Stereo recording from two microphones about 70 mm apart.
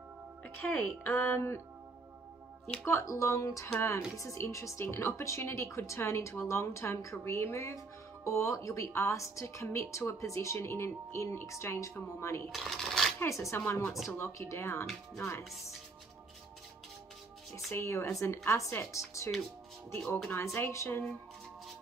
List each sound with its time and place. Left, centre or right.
0.6 s speech: left
2.8 s speech: left
3.1 s speech: left
12.4 s speech: centre
13.2 s speech: left
17.6 s speech: left
20.4 s speech: left